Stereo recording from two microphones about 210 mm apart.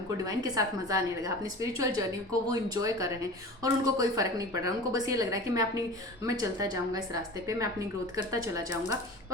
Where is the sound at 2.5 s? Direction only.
20° right (ahead or behind).